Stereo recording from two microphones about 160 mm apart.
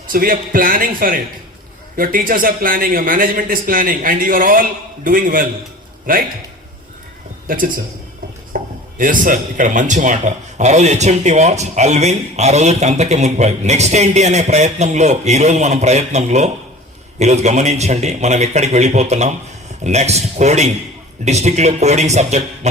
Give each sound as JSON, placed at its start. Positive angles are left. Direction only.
{"t": 0.1, "sound": "a man's voice", "side_deg": -60}
{"t": 7.4, "sound": "a man's voice", "side_deg": -60}